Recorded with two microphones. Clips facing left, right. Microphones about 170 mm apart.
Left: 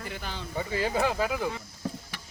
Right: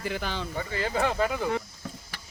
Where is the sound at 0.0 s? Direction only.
90° right.